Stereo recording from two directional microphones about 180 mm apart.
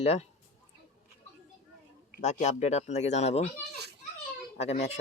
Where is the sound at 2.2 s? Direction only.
40° left (ahead or behind).